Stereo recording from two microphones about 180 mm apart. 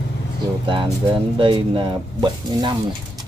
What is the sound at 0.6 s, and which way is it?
Speech, 25° right (ahead or behind).